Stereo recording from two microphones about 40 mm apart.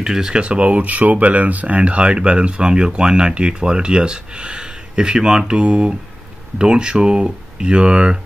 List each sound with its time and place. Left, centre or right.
0.0 s speech: centre; by 1.8 s right
1.8 s speech: right